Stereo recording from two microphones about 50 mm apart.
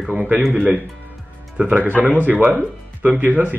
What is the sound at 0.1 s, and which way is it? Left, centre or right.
Speech, right.